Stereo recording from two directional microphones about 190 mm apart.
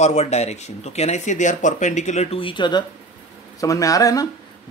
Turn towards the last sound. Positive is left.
turn(degrees=20)  # may be behind; listen again after turning